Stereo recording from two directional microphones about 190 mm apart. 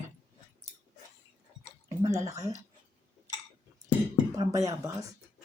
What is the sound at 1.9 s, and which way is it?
Drip, 15° right (ahead or behind).